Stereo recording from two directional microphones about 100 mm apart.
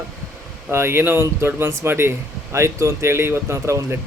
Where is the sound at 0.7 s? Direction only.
25° right (ahead or behind).